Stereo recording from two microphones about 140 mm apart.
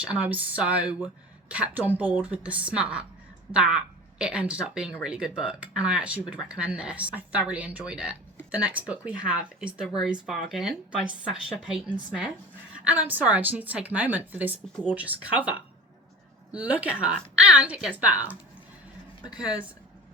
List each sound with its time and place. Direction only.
0.0 s a woman's voice: 10° right (ahead or behind)
19.4 s speech: 5° right (ahead or behind)